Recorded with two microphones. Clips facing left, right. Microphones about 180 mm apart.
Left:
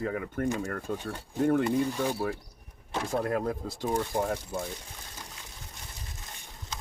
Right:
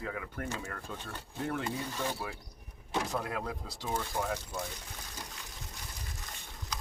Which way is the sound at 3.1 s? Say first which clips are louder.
Left 7 dB; 50° left (ahead or behind).